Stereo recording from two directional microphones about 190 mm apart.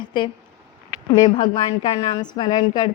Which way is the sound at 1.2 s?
20° left (ahead or behind).